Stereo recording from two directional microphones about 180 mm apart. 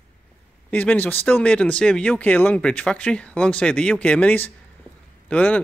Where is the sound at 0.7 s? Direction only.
10° left (ahead or behind).